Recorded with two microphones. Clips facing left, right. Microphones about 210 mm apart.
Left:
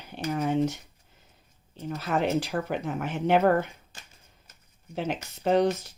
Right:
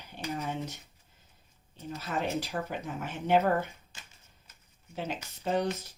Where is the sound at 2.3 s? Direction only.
80° left.